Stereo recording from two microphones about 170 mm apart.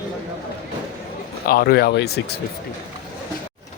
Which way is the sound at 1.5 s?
65° left (ahead or behind).